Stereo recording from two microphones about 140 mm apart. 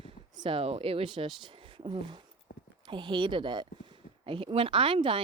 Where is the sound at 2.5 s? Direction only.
90° left.